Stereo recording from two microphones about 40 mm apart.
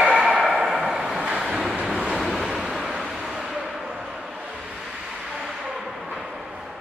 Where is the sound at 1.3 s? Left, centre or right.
Centre.